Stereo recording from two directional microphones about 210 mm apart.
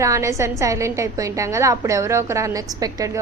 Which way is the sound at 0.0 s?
15° right (ahead or behind).